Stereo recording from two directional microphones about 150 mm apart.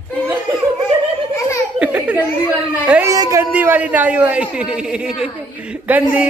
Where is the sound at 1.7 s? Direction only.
10° right (ahead or behind).